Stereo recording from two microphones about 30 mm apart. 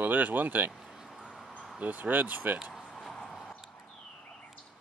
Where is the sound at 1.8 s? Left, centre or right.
Right.